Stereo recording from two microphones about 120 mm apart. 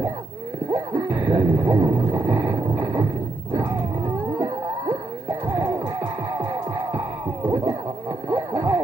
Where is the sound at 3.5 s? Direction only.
15° right (ahead or behind).